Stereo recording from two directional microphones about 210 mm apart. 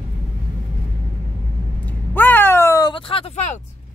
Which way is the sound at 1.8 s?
10° left (ahead or behind).